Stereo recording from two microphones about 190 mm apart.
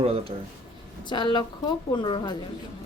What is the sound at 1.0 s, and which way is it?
A woman's voice, 25° left (ahead or behind).